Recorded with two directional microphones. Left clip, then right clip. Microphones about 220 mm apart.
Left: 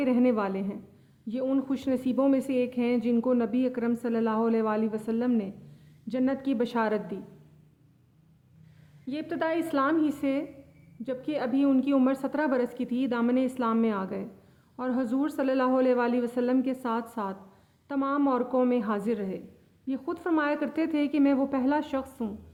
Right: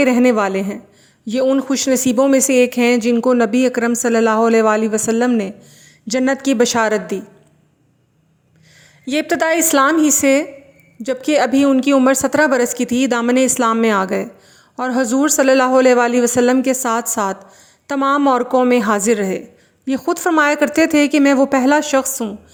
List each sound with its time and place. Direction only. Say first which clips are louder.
0.0 s a woman's voice: right 12 dB; 35° right (ahead or behind)
9.0 s a woman's voice: right 14 dB; 35° right (ahead or behind)